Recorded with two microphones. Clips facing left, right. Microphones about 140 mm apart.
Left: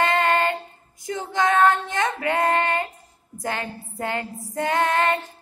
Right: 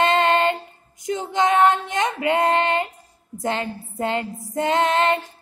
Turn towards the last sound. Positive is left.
turn(degrees=-20)  # may be behind; listen again after turning